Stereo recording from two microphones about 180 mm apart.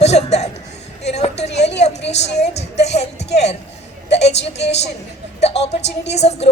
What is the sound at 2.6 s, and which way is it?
Speech, 70° left (ahead or behind).